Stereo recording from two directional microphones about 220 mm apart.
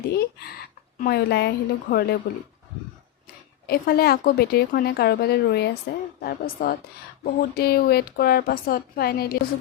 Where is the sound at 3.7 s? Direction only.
45° left (ahead or behind).